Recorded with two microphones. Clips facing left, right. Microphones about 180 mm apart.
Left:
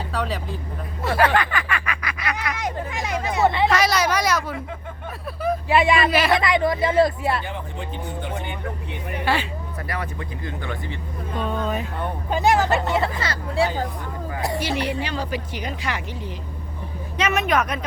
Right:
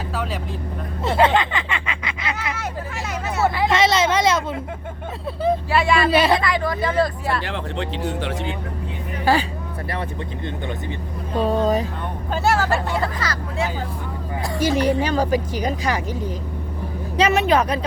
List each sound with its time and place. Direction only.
0.1 s speech: centre (ahead or behind)
1.0 s speech: 25° right (ahead or behind)
2.6 s a sound: 15° left (ahead or behind)
3.7 s speech: 25° right (ahead or behind)
5.6 s speech: 20° left (ahead or behind)
6.1 s speech: 25° right (ahead or behind)
6.4 s speech: 25° left (ahead or behind)
7.4 s speech: 80° right
9.2 s speech: 40° right (ahead or behind)
9.9 s speech: 25° right (ahead or behind)
11.3 s speech: 35° right (ahead or behind)
12.3 s speech: 15° left (ahead or behind)
14.6 s speech: 45° right (ahead or behind)